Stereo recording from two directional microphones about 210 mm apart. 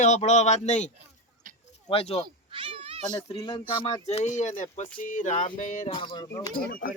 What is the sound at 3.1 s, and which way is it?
Speech, 20° left (ahead or behind).